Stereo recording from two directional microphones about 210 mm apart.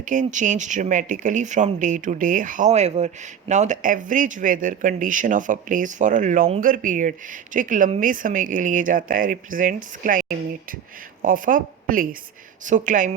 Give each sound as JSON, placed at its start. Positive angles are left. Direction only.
{"t": 0.0, "sound": "a woman's voice", "side_deg": -40}